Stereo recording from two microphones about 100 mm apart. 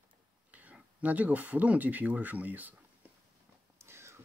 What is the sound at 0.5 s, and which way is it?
Speech, 15° right (ahead or behind).